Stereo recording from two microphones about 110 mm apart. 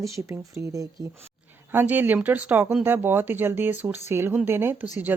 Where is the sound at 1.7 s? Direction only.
15° right (ahead or behind).